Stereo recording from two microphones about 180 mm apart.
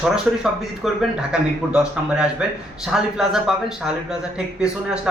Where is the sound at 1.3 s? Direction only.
5° right (ahead or behind).